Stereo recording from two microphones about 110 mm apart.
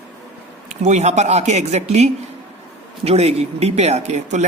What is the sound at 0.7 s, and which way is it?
Speech, 90° right.